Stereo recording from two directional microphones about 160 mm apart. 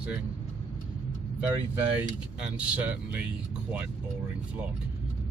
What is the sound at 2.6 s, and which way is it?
Speech, 5° right (ahead or behind).